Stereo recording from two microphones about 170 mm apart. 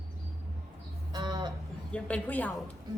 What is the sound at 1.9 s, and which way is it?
Speech, 5° left (ahead or behind).